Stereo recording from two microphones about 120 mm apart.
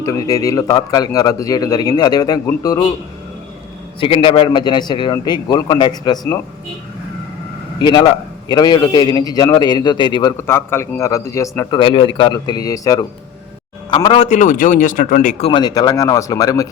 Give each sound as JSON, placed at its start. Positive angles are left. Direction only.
{"t": 0.0, "sound": "a man's voice", "side_deg": 30}
{"t": 4.0, "sound": "a man's voice", "side_deg": 45}
{"t": 7.8, "sound": "a man's voice", "side_deg": 40}
{"t": 10.3, "sound": "a man's voice", "side_deg": 20}
{"t": 11.8, "sound": "a man's voice", "side_deg": 45}
{"t": 13.9, "sound": "speech", "side_deg": 45}
{"t": 14.3, "sound": "speech", "side_deg": 90}
{"t": 15.4, "sound": "a man's voice", "side_deg": 40}